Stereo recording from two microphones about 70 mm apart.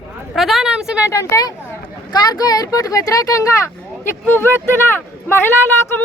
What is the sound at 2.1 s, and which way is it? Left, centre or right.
Speech, left.